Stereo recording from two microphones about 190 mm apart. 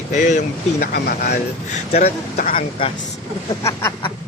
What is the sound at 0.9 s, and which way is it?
Speech, 60° left (ahead or behind).